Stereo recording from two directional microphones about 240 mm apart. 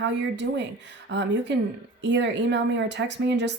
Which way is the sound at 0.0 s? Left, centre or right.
Right.